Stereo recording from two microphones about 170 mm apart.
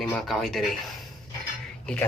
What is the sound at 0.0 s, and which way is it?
Speech, 5° left (ahead or behind).